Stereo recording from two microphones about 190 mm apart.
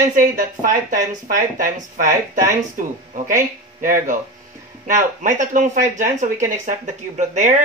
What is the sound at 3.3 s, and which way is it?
Speech, 45° right (ahead or behind).